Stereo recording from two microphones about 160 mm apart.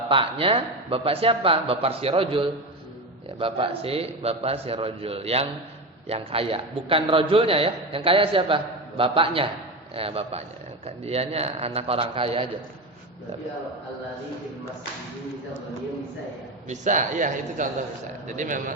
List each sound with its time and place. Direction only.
0.1 s a man's voice: 35° right (ahead or behind)
16.6 s a man's voice: 50° right (ahead or behind)